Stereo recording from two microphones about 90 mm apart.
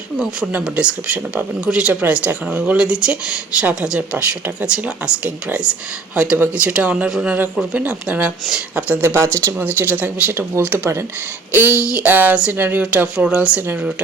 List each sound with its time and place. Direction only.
0.6 s speech: 10° right (ahead or behind)
11.5 s speech: 15° right (ahead or behind)